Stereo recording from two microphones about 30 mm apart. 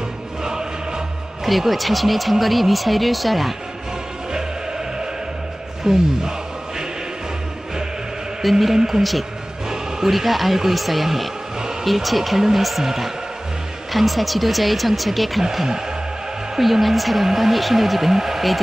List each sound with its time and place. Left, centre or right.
0.4 s music: right
1.4 s speech: centre
5.9 s a man's voice: centre
8.4 s a man's voice: centre
9.7 s a sound: centre
10.1 s a man's voice: centre
13.9 s speech: centre
16.5 s speech: centre